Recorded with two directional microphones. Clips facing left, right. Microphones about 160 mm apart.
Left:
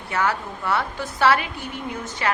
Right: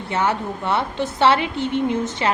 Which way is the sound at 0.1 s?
25° right (ahead or behind).